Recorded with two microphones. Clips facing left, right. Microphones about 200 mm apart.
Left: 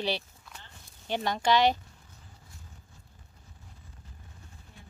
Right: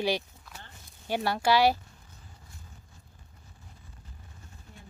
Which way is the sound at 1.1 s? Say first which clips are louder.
Right 1 dB; 10° right (ahead or behind).